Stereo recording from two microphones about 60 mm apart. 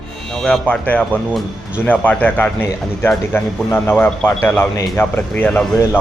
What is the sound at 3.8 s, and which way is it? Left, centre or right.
Speech, left.